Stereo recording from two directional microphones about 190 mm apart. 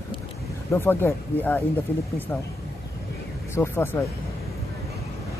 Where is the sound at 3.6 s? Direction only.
15° left (ahead or behind).